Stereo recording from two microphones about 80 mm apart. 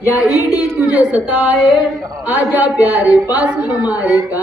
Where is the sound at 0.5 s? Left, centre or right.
Centre.